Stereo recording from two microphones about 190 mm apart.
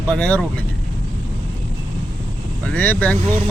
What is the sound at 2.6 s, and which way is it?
Speech, 10° left (ahead or behind).